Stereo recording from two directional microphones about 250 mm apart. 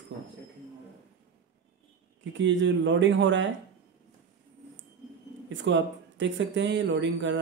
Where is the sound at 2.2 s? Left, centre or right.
Right.